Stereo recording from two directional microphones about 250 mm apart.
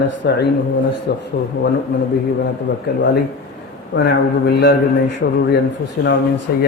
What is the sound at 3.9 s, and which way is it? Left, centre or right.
A man's voice, left.